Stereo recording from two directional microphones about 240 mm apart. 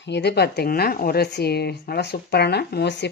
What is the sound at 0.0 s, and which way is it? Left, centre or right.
Speech, left.